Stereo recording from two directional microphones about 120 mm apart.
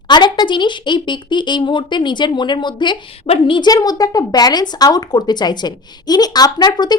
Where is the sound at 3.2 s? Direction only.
50° left (ahead or behind).